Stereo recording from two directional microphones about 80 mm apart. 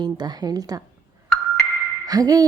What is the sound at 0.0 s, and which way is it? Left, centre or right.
Speech, right.